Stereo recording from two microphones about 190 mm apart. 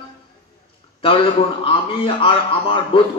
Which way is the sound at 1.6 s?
30° left (ahead or behind).